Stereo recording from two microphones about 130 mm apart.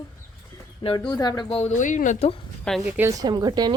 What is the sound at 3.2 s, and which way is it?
Speech, 30° right (ahead or behind).